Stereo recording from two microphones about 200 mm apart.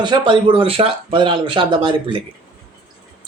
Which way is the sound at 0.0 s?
25° right (ahead or behind).